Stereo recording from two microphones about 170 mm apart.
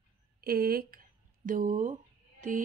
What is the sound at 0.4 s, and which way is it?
Speech, 60° right (ahead or behind).